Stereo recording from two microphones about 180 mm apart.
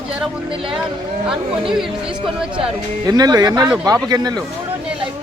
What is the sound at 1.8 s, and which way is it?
Speech, 5° right (ahead or behind).